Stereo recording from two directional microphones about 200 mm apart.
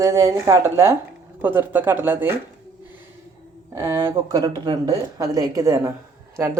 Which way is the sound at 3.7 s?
15° right (ahead or behind).